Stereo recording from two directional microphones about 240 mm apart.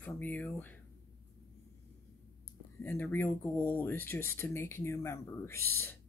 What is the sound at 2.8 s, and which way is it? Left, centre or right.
Speech, centre.